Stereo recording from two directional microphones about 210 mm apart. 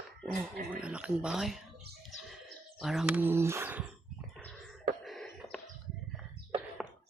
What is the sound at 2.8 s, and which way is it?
Speech, centre (ahead or behind).